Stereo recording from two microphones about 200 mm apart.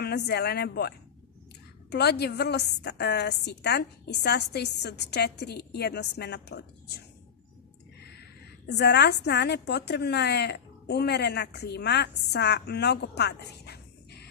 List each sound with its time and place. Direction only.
0.0 s a woman's voice: 55° left (ahead or behind)
8.0 s a woman's voice: 55° left (ahead or behind)